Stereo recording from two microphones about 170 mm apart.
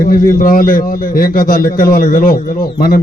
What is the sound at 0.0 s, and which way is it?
A man's voice, 55° left (ahead or behind).